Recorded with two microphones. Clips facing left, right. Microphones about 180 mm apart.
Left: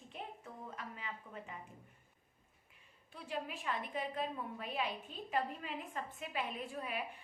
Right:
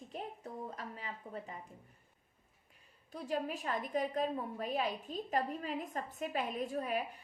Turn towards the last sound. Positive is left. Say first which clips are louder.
# right 6 dB
turn(degrees=-40)  # may be behind; listen again after turning